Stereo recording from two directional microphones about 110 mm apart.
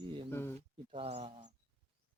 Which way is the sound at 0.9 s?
80° right.